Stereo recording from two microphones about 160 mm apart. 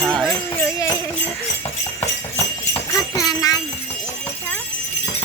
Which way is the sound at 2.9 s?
20° left (ahead or behind).